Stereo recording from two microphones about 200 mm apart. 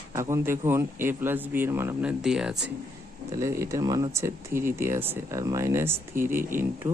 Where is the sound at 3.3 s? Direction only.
15° right (ahead or behind).